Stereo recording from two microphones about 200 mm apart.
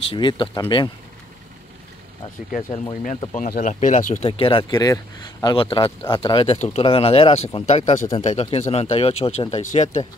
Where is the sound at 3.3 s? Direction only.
40° left (ahead or behind).